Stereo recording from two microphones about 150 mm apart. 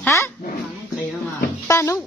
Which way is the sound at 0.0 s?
20° left (ahead or behind).